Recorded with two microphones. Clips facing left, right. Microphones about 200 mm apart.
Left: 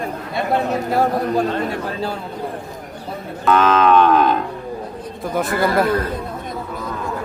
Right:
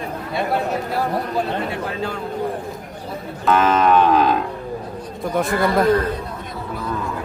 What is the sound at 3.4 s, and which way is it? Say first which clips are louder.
Speech: left 1 dB; 5° right (ahead or behind).